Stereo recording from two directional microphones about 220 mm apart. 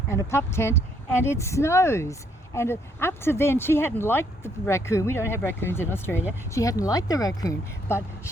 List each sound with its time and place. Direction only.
0.1 s speech: 10° left (ahead or behind)